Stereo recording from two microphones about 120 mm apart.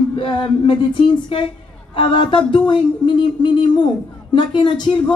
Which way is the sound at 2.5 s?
40° left (ahead or behind).